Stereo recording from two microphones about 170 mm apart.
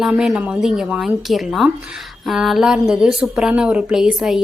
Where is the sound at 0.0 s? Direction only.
5° right (ahead or behind).